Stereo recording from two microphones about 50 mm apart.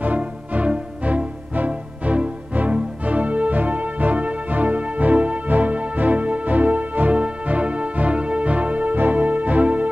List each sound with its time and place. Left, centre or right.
0.0 s music: right